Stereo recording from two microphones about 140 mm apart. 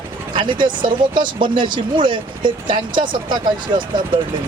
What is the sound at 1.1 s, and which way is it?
Speech, 35° right (ahead or behind).